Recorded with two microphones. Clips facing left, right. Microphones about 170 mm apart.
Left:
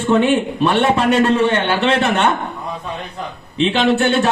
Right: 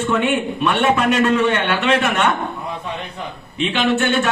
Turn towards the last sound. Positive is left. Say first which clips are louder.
# left 3 dB
turn(degrees=35)  # may be behind; listen again after turning